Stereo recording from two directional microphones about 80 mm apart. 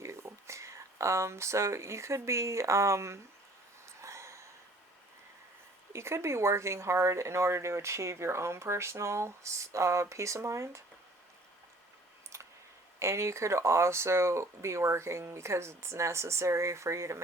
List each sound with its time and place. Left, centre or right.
0.0 s speech: right
3.8 s a sound: right
5.9 s speech: right
12.3 s clicking: right
13.0 s speech: right